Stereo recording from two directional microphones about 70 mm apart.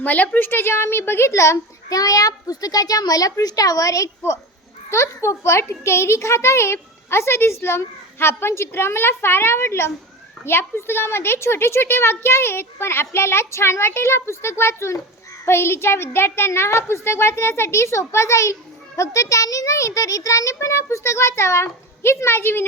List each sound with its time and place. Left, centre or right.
0.0 s a woman's voice: left